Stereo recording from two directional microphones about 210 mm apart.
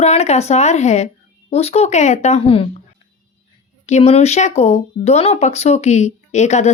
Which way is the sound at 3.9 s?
30° left (ahead or behind).